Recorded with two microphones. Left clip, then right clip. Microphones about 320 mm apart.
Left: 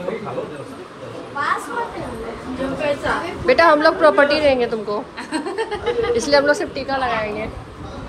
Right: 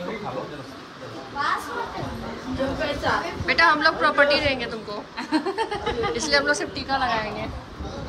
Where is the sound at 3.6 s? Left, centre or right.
Centre.